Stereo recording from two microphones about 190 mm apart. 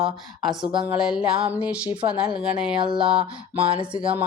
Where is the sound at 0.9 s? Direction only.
5° right (ahead or behind).